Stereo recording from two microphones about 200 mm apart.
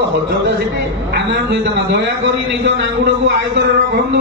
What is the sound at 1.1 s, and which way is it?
Speech, 60° right (ahead or behind).